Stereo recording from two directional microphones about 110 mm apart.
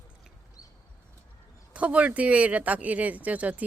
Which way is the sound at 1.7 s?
10° right (ahead or behind).